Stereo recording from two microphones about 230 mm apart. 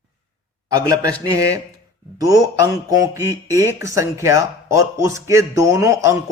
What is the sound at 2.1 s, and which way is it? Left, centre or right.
A man's voice, centre.